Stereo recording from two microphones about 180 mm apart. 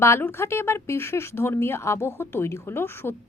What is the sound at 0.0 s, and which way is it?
Speech, 15° left (ahead or behind).